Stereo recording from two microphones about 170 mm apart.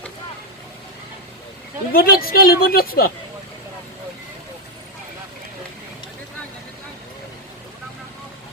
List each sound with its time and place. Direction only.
1.9 s a woman's voice: 60° left (ahead or behind)